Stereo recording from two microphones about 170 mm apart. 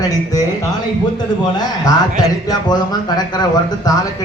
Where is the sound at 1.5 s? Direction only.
25° left (ahead or behind).